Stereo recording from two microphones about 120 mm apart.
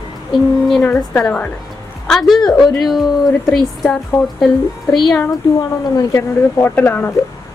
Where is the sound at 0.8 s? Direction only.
10° left (ahead or behind).